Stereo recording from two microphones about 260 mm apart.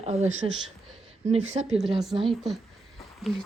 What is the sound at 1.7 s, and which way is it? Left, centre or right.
Speech, centre.